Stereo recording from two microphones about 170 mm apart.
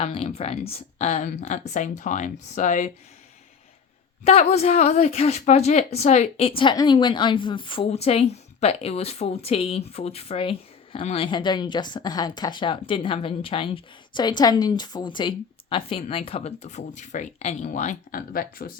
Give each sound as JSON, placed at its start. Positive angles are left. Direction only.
{"t": 0.0, "sound": "speech", "side_deg": 35}
{"t": 4.2, "sound": "a woman's voice", "side_deg": 35}
{"t": 6.6, "sound": "a woman's voice", "side_deg": 25}